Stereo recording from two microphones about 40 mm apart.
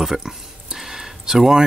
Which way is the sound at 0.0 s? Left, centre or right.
Centre.